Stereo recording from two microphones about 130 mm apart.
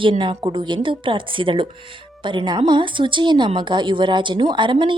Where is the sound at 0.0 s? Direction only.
40° right (ahead or behind).